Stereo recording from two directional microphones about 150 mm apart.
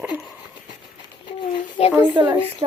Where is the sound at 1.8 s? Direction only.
45° left (ahead or behind).